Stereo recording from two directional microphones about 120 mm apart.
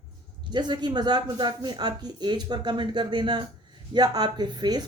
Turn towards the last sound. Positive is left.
turn(degrees=-35)  # may be behind; listen again after turning